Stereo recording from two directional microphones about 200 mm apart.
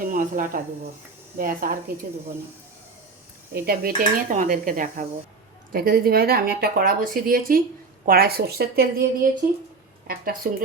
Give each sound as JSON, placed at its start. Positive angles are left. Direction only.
{"t": 0.0, "sound": "speech", "side_deg": -45}
{"t": 3.5, "sound": "speech", "side_deg": -50}